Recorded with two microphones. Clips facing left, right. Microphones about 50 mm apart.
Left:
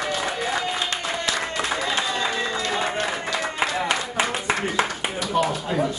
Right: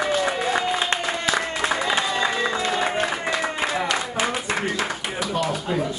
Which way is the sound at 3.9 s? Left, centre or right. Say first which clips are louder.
Even; centre.